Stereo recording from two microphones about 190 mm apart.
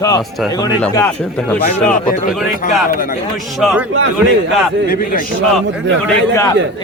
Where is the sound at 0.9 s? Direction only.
15° left (ahead or behind).